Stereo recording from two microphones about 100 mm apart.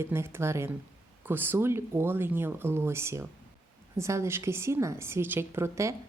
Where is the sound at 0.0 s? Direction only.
25° right (ahead or behind).